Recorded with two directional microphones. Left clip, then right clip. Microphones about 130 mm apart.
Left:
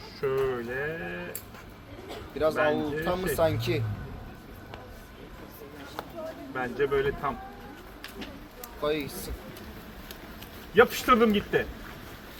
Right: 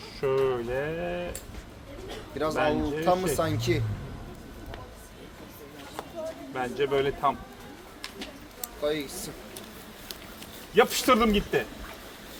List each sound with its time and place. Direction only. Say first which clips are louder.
0.2 s speech: right 2 dB; 30° right (ahead or behind)
2.4 s speech: left 1 dB; 30° right (ahead or behind)
6.5 s speech: even; 25° right (ahead or behind)
10.8 s speech: left 1 dB; 25° right (ahead or behind)